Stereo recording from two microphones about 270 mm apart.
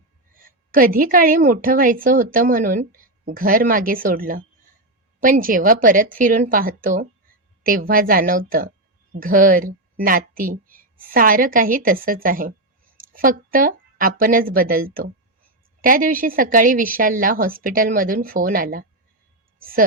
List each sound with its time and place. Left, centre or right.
0.3 s a woman's voice: right